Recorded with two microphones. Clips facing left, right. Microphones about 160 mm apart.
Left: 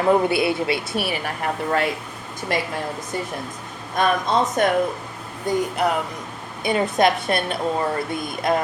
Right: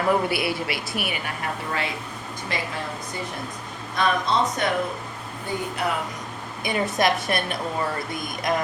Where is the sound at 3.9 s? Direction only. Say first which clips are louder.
Left 3 dB; 50° left (ahead or behind).